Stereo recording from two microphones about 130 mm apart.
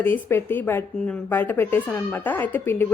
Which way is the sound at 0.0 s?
15° left (ahead or behind).